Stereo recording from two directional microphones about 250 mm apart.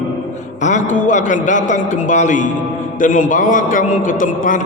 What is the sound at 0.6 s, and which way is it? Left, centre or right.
A man's voice, left.